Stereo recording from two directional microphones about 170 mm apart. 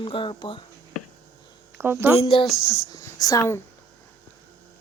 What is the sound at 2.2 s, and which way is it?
Speech, 30° left (ahead or behind).